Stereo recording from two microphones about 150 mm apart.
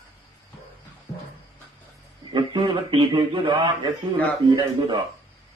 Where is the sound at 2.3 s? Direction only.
30° right (ahead or behind).